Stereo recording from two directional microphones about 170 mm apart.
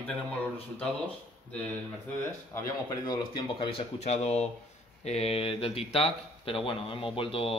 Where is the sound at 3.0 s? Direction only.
30° left (ahead or behind).